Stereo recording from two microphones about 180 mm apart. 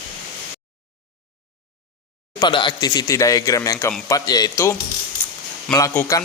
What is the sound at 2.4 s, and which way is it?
Speech, 25° left (ahead or behind).